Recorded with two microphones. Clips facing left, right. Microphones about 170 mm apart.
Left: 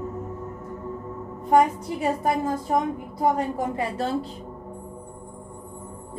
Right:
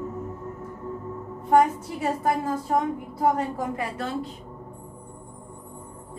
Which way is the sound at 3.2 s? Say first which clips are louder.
Left 1 dB; 15° left (ahead or behind).